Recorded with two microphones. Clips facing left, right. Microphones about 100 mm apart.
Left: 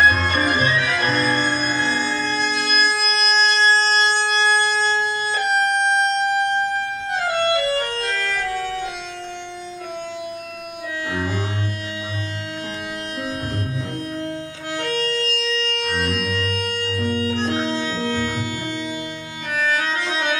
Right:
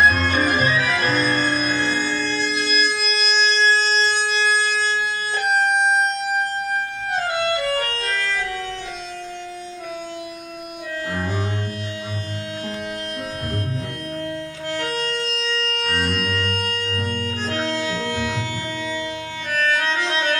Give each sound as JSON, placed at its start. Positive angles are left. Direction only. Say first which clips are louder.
{"t": 0.0, "sound": "music", "louder": "even", "side_deg": 0}
{"t": 4.1, "sound": "wind instrument", "louder": "left 2 dB", "side_deg": 35}
{"t": 4.6, "sound": "music", "louder": "left 2 dB", "side_deg": 0}
{"t": 7.3, "sound": "music", "louder": "left 4 dB", "side_deg": 0}
{"t": 14.8, "sound": "music", "louder": "left 3 dB", "side_deg": 0}
{"t": 19.6, "sound": "music", "louder": "right 1 dB", "side_deg": 5}